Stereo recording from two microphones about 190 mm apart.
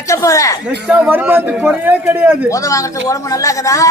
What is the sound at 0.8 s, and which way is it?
A man's voice, 10° right (ahead or behind).